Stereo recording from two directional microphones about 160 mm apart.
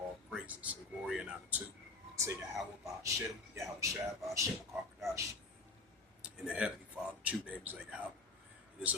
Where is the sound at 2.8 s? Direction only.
20° right (ahead or behind).